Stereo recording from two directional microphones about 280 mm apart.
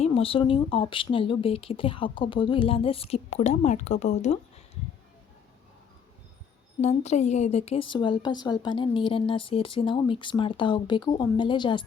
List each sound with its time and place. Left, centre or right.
0.0 s speech: centre
6.8 s speech: left